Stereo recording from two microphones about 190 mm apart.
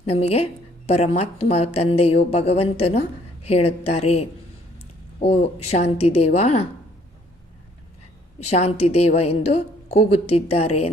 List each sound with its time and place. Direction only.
0.0 s a woman's voice: 35° left (ahead or behind)
8.4 s a woman's voice: 35° left (ahead or behind)